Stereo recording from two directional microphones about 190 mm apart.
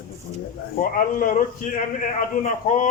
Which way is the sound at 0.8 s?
45° left (ahead or behind).